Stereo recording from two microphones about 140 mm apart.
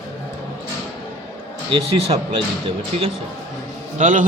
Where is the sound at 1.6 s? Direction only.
40° right (ahead or behind).